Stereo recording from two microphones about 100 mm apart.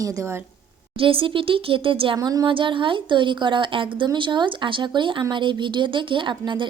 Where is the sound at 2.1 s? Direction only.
40° right (ahead or behind).